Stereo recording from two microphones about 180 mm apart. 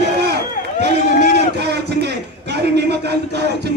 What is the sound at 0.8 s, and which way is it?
A man's voice, 65° right (ahead or behind).